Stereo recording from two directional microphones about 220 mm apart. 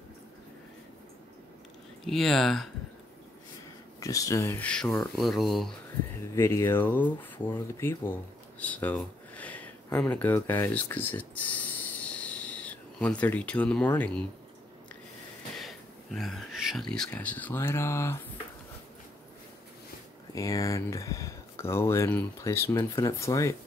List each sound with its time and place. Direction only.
2.0 s speech: centre (ahead or behind)
4.0 s speech: 15° left (ahead or behind)
6.3 s speech: 10° left (ahead or behind)
15.6 s speech: centre (ahead or behind)
20.3 s speech: 15° left (ahead or behind)